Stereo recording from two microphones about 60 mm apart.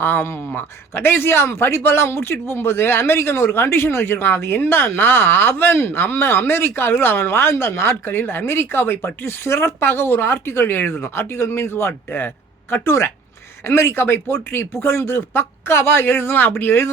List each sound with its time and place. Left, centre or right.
0.0 s speech: left
14.3 s speech: left